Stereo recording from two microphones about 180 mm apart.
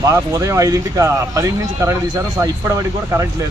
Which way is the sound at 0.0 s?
20° right (ahead or behind).